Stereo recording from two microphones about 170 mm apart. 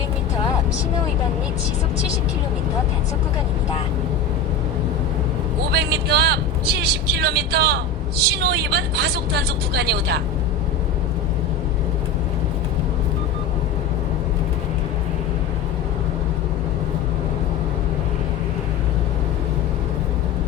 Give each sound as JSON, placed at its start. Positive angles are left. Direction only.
{"t": 5.7, "sound": "speech", "side_deg": -75}